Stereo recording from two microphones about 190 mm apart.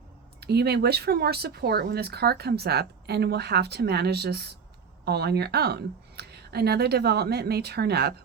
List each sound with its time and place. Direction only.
0.3 s speech: 60° right (ahead or behind)